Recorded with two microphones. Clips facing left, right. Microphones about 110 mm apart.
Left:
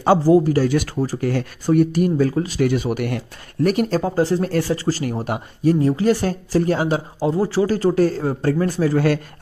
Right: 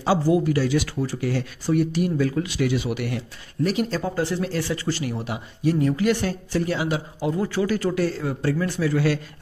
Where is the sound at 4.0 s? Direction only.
35° left (ahead or behind).